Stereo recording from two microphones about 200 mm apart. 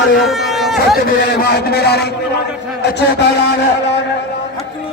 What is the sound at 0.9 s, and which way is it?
A man's voice, 50° left (ahead or behind).